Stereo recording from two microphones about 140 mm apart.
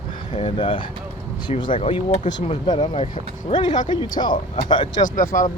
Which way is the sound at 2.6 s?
35° left (ahead or behind).